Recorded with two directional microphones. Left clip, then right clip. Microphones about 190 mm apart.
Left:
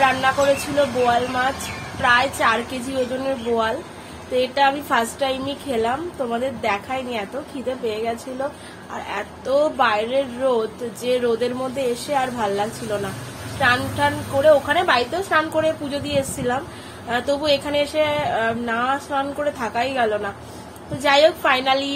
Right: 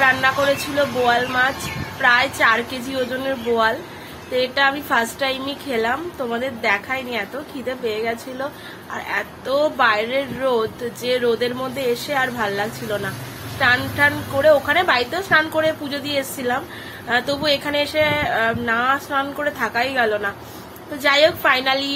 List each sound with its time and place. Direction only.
0.0 s a woman's voice: 5° left (ahead or behind)